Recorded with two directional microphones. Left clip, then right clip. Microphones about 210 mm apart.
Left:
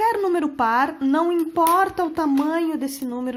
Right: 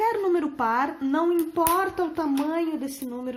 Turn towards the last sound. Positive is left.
turn(degrees=40)  # may be behind; listen again after turning